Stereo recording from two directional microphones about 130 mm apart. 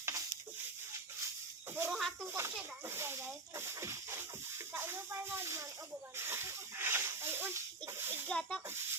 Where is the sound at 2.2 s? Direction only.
20° right (ahead or behind).